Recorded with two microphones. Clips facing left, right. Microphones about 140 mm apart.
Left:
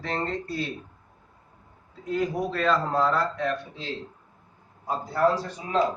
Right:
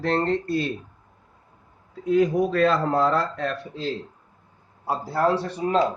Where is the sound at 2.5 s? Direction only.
60° right (ahead or behind).